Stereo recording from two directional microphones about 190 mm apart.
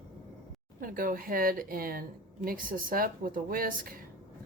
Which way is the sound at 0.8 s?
45° right (ahead or behind).